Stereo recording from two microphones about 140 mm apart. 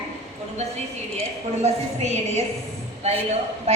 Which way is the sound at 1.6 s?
55° right (ahead or behind).